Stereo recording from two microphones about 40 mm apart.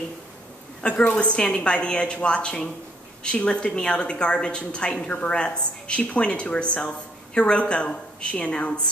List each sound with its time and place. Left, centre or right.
0.8 s a woman's voice: left